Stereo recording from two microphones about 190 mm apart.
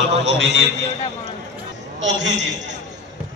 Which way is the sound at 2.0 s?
70° right (ahead or behind).